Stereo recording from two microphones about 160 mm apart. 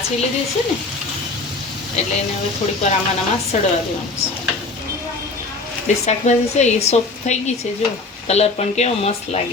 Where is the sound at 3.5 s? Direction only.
45° left (ahead or behind).